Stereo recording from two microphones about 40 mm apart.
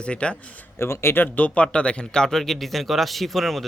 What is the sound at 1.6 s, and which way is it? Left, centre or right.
Speech, left.